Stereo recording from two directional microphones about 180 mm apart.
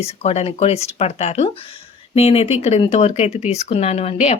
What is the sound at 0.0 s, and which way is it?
Speech, 35° left (ahead or behind).